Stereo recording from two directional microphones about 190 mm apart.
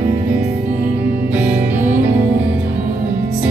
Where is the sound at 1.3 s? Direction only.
10° right (ahead or behind).